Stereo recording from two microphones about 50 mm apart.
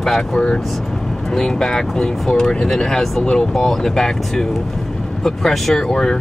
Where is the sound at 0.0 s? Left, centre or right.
Centre.